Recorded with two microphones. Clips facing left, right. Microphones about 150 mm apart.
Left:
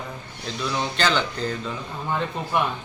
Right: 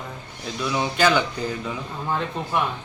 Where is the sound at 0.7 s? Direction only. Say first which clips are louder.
Right 3 dB; 10° right (ahead or behind).